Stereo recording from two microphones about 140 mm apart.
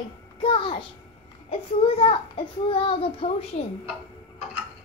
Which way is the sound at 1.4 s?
45° left (ahead or behind).